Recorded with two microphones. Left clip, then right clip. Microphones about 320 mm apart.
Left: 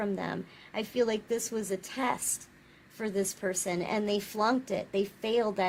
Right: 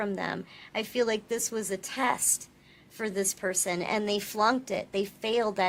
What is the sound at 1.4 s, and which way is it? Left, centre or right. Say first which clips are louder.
Speech: right 2 dB; left.